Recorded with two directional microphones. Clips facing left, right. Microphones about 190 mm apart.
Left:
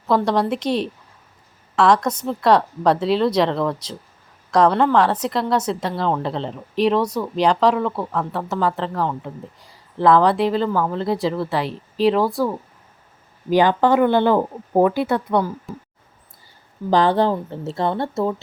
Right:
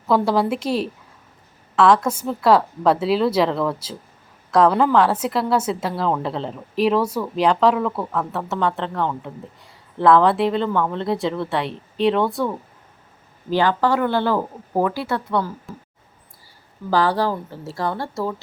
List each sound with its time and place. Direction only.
0.1 s a woman's voice: 5° right (ahead or behind)
13.5 s speech: 15° left (ahead or behind)
16.9 s speech: 20° left (ahead or behind)